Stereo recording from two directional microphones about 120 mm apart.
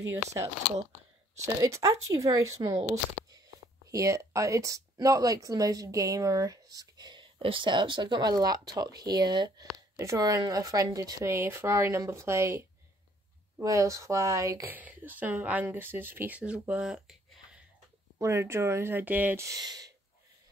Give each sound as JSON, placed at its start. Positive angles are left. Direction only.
{"t": 1.4, "sound": "speech", "side_deg": -25}
{"t": 14.7, "sound": "speech", "side_deg": -15}
{"t": 18.2, "sound": "speech", "side_deg": -20}
{"t": 19.4, "sound": "speech", "side_deg": -30}